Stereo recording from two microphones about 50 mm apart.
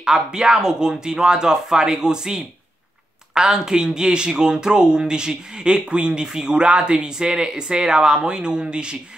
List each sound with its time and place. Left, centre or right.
0.0 s speech: centre